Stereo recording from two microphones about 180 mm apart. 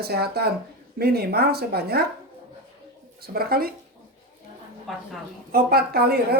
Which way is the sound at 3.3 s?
55° right (ahead or behind).